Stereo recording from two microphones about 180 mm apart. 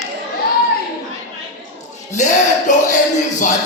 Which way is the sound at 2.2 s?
40° left (ahead or behind).